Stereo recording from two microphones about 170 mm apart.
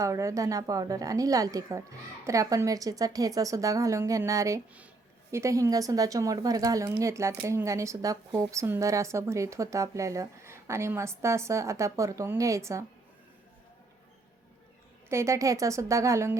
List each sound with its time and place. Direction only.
0.0 s a woman's voice: 20° right (ahead or behind)
15.1 s a woman's voice: 15° right (ahead or behind)